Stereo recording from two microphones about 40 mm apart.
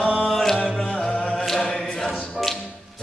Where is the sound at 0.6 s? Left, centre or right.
Left.